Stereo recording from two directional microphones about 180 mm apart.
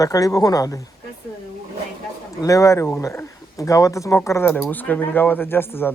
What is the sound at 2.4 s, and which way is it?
Speech, 15° left (ahead or behind).